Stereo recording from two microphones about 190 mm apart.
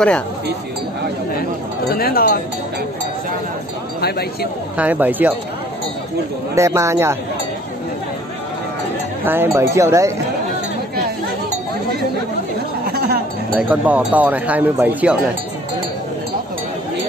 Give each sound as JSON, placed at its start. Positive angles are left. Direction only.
{"t": 1.9, "sound": "speech", "side_deg": 55}
{"t": 4.0, "sound": "speech", "side_deg": 55}
{"t": 4.7, "sound": "speech", "side_deg": -10}
{"t": 6.5, "sound": "speech", "side_deg": -15}
{"t": 9.2, "sound": "speech", "side_deg": -10}
{"t": 12.8, "sound": "music", "side_deg": -55}
{"t": 13.6, "sound": "speech", "side_deg": -10}